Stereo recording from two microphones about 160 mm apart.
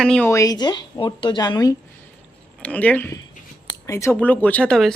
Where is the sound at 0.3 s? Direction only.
20° left (ahead or behind).